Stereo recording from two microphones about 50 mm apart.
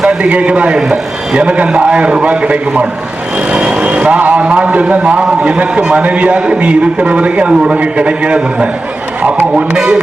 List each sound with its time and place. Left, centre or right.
0.2 s a man's voice: right
9.7 s speech: centre